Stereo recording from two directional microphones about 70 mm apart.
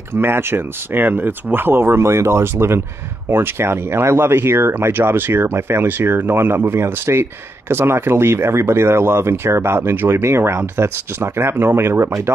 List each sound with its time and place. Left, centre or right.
0.1 s speech: right